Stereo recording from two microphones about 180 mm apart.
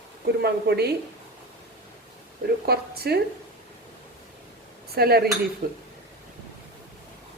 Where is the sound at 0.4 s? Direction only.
65° right (ahead or behind).